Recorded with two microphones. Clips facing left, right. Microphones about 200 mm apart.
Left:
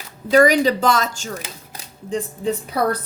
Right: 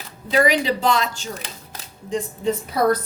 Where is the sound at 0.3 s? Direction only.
40° left (ahead or behind).